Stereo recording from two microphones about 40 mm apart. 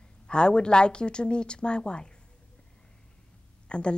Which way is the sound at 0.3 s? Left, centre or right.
Left.